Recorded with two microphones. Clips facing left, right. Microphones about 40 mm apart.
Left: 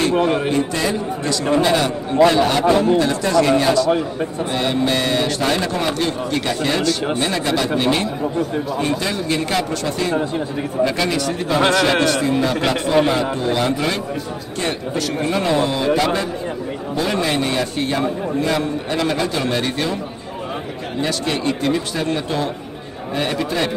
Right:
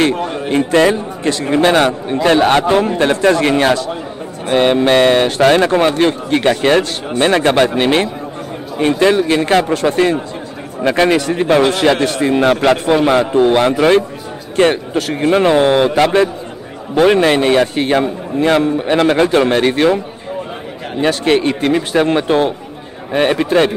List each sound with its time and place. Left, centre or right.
0.1 s a man's voice: left
0.5 s speech: right
1.6 s speech: right
15.0 s speech: right
21.0 s speech: right